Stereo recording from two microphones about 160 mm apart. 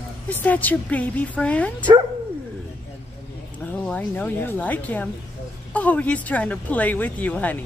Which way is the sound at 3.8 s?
10° left (ahead or behind).